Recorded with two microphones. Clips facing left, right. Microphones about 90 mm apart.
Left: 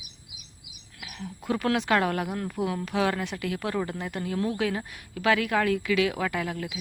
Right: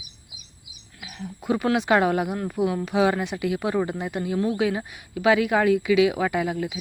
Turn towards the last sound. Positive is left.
turn(degrees=-15)  # may be behind; listen again after turning